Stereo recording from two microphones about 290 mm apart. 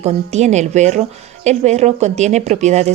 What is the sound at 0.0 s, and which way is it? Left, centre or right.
Speech, right.